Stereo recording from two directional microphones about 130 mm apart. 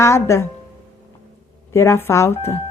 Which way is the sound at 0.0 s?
20° left (ahead or behind).